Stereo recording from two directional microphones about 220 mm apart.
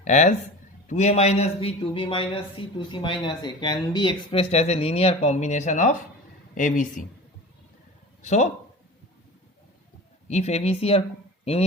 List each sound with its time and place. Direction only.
0.0 s speech: 30° left (ahead or behind)
8.2 s speech: 35° left (ahead or behind)
10.2 s speech: 30° left (ahead or behind)